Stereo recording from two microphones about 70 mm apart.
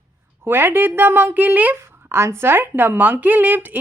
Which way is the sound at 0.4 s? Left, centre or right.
Right.